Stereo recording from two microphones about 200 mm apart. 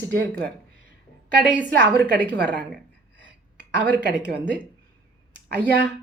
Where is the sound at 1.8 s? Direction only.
60° right (ahead or behind).